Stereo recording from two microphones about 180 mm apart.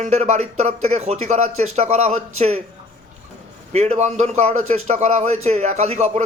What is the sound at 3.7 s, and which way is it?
A man's voice, 40° right (ahead or behind).